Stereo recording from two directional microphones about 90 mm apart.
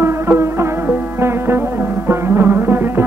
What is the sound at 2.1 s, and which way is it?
Music, 25° right (ahead or behind).